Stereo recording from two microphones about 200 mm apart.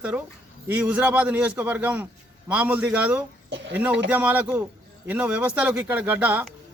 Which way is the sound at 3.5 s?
60° right (ahead or behind).